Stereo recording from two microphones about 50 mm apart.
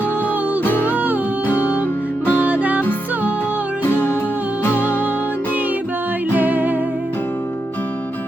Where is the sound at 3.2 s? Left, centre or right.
Left.